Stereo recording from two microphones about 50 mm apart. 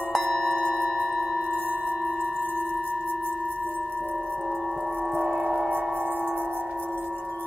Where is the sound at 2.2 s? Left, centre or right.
Right.